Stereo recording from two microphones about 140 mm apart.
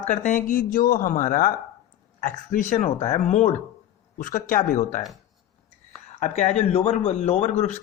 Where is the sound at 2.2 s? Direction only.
70° left (ahead or behind).